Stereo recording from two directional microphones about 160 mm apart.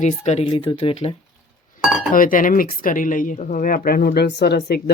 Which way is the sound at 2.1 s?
60° left (ahead or behind).